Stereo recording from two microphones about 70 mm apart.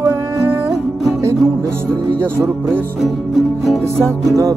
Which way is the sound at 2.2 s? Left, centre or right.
Right.